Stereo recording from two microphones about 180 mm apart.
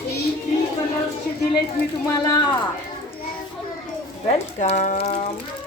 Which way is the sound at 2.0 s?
20° left (ahead or behind).